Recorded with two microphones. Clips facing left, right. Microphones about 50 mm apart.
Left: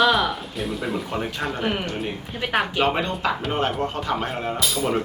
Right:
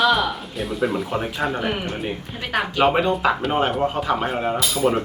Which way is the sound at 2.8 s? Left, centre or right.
Centre.